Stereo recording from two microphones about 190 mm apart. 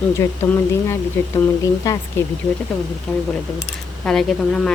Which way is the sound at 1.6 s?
20° left (ahead or behind).